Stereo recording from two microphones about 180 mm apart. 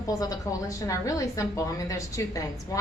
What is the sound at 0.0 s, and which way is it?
A woman's voice, 20° left (ahead or behind).